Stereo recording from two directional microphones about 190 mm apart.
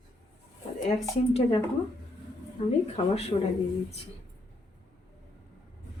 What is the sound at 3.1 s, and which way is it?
Speech, 30° left (ahead or behind).